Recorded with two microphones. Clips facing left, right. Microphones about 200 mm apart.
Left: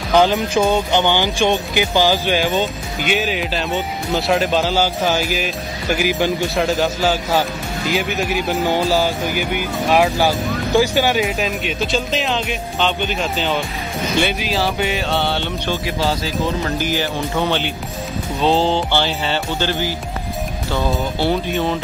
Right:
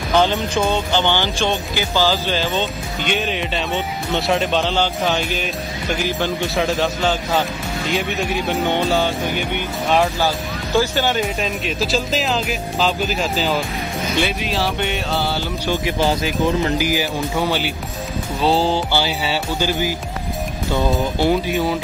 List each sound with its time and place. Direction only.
0.1 s speech: 15° left (ahead or behind)
6.4 s speech: centre (ahead or behind)
15.7 s speech: 20° right (ahead or behind)
16.7 s music: 10° right (ahead or behind)
21.2 s music: 10° right (ahead or behind)